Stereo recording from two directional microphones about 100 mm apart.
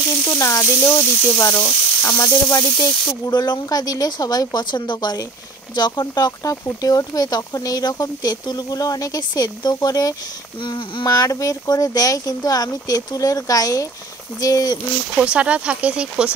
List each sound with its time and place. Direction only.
0.3 s speech: 30° left (ahead or behind)
10.6 s speech: 50° left (ahead or behind)
11.1 s speech: 35° left (ahead or behind)
15.1 s speech: 10° right (ahead or behind)